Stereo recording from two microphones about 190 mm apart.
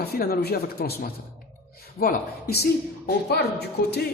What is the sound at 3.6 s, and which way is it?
Speech, 55° left (ahead or behind).